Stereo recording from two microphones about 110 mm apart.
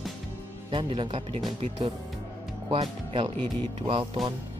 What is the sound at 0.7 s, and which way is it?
Speech, 50° right (ahead or behind).